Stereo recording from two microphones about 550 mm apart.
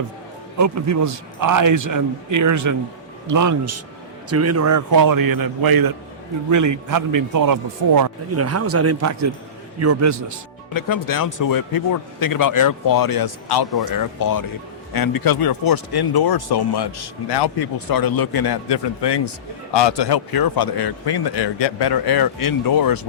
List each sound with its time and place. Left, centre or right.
0.6 s a man's voice: right
10.8 s speech: left